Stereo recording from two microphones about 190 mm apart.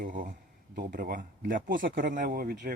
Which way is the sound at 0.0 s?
45° right (ahead or behind).